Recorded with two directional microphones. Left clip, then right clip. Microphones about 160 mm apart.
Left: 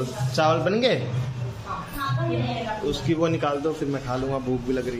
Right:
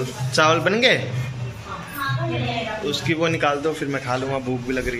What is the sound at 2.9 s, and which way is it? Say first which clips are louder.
A man's voice: right 2 dB; 15° left (ahead or behind).